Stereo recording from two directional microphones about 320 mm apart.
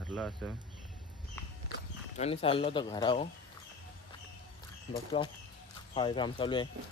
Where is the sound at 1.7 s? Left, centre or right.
Left.